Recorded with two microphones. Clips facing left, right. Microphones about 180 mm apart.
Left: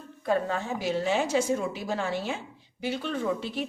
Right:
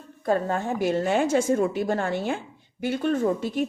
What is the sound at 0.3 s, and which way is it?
A woman's voice, 45° right (ahead or behind).